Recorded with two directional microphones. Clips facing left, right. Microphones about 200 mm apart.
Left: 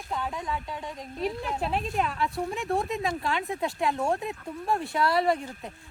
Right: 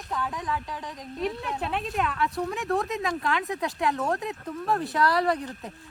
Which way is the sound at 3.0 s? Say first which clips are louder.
Right 1 dB; 30° left (ahead or behind).